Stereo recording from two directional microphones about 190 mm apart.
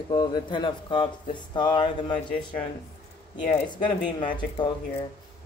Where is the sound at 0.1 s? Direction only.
25° left (ahead or behind).